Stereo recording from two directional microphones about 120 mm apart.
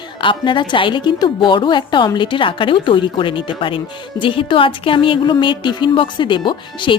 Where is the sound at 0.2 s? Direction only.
45° left (ahead or behind).